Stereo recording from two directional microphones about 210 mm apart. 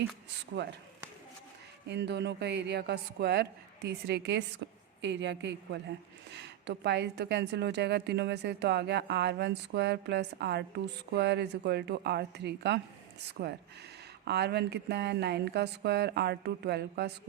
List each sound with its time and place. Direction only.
1.9 s a woman's voice: 55° right (ahead or behind)